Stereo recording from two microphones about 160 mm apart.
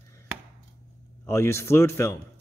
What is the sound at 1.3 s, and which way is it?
Speech, 15° left (ahead or behind).